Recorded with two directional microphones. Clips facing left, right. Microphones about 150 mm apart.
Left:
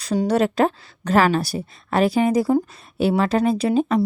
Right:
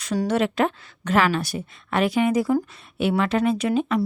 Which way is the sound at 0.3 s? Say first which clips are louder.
Left 3 dB; 40° left (ahead or behind).